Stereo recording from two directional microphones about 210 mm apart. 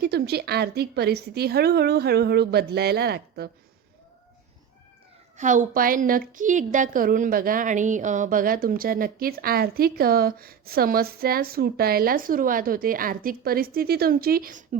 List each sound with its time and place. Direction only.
0.0 s a woman's voice: 50° right (ahead or behind)
5.4 s a woman's voice: 35° right (ahead or behind)